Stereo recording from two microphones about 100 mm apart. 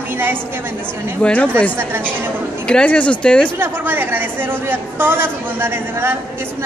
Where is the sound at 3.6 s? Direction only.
20° right (ahead or behind).